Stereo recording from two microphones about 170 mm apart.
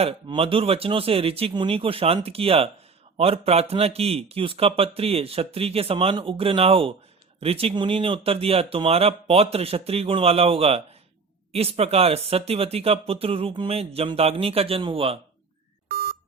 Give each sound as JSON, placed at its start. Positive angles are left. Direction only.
{"t": 0.0, "sound": "speech", "side_deg": -35}
{"t": 15.9, "sound": "beep", "side_deg": -65}